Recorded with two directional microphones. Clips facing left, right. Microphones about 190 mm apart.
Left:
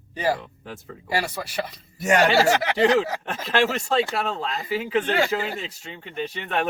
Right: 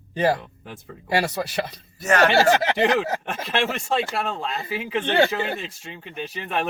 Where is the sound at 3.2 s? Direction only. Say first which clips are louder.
Left 2 dB; 10° right (ahead or behind).